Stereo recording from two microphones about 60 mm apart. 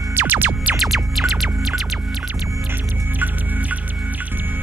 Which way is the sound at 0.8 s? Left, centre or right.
Centre.